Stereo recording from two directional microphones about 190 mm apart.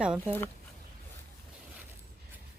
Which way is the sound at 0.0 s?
5° right (ahead or behind).